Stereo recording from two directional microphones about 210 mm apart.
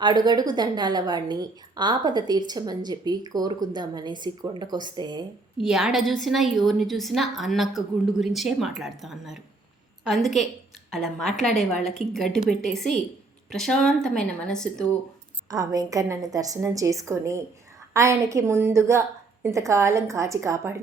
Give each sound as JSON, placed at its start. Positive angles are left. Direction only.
{"t": 0.0, "sound": "a woman's voice", "side_deg": -20}
{"t": 5.5, "sound": "a woman's voice", "side_deg": 0}
{"t": 15.4, "sound": "a woman's voice", "side_deg": -15}